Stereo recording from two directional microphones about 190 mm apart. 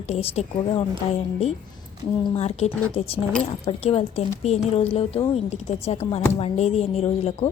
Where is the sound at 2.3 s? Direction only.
35° left (ahead or behind).